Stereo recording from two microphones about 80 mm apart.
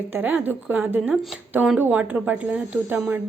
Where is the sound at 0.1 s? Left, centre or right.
Right.